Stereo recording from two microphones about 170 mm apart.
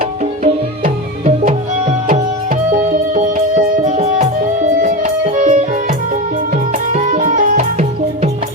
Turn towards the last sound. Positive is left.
turn(degrees=-45)  # may be behind; listen again after turning